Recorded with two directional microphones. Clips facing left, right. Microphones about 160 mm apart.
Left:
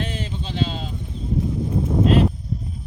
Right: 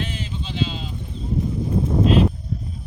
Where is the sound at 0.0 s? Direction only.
45° left (ahead or behind).